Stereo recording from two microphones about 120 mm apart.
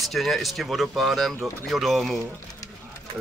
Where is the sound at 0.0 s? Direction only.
Centre (ahead or behind).